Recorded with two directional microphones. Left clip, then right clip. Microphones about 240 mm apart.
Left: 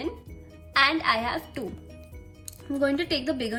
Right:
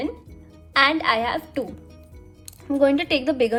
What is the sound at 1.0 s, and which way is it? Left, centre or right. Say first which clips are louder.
A woman's voice: right 4 dB; right.